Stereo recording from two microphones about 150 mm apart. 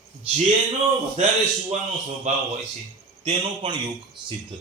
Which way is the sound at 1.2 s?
50° right (ahead or behind).